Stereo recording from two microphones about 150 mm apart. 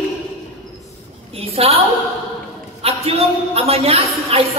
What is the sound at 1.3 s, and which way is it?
Speech, 40° right (ahead or behind).